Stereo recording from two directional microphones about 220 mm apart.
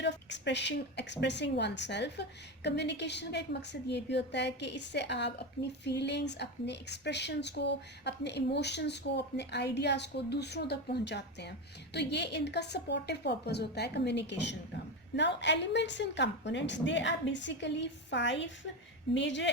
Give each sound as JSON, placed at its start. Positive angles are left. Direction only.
{"t": 0.0, "sound": "a woman's voice", "side_deg": 50}